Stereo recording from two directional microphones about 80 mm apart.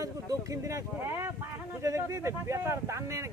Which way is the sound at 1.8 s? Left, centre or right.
Right.